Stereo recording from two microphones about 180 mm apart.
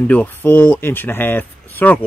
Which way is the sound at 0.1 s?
10° left (ahead or behind).